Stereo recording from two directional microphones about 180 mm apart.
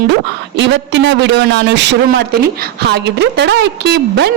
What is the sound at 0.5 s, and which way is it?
A woman's voice, 80° right.